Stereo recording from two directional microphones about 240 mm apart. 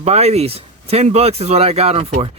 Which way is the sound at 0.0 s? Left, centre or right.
Right.